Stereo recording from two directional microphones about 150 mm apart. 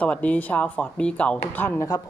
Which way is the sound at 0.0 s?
10° left (ahead or behind).